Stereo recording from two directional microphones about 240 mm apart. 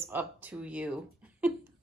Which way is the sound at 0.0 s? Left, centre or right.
Centre.